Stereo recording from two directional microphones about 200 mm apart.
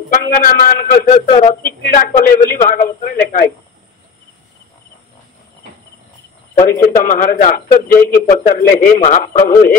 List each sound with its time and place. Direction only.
0.1 s a man's voice: 45° left (ahead or behind)
6.7 s a man's voice: 45° left (ahead or behind)
7.9 s speech: 10° left (ahead or behind)
8.3 s a man's voice: 45° left (ahead or behind)